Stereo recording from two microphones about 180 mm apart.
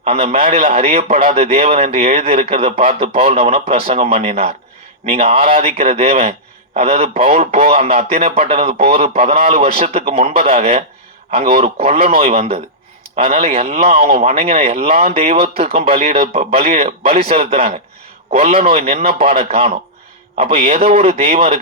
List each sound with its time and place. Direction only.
0.0 s a man's voice: 35° right (ahead or behind)